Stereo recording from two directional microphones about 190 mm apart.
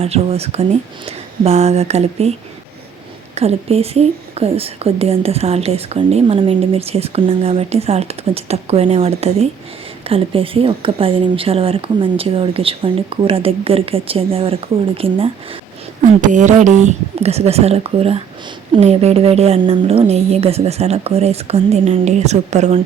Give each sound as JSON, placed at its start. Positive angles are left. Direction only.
{"t": 0.0, "sound": "speech", "side_deg": -30}
{"t": 3.3, "sound": "a woman's voice", "side_deg": -35}
{"t": 16.0, "sound": "speech", "side_deg": -40}